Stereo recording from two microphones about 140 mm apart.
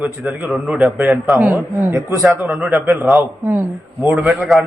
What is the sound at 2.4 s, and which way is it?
Speech, centre (ahead or behind).